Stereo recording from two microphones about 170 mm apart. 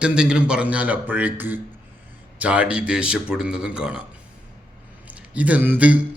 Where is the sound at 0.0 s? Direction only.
5° right (ahead or behind).